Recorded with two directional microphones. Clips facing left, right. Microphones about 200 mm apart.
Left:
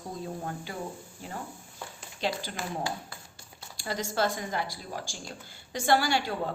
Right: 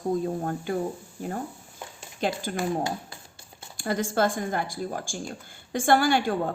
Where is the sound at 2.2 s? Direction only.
50° right (ahead or behind).